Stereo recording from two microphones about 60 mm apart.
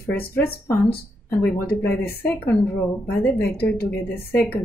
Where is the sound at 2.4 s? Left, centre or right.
Left.